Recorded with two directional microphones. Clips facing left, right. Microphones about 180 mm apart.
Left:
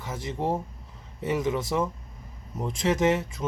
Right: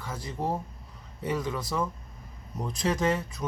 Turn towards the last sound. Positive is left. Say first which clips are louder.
# left 4 dB
turn(degrees=20)  # may be behind; listen again after turning